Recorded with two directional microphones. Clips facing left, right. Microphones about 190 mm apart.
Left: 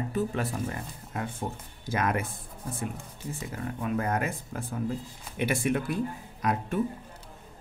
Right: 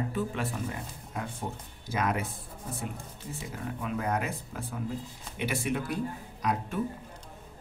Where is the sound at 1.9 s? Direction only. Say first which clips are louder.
Left 2 dB; 50° left (ahead or behind).